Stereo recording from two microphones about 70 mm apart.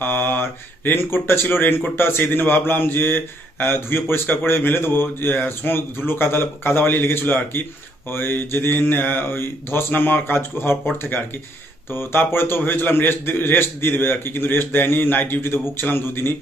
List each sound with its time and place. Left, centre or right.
0.0 s mantra: left
0.9 s a man's voice: left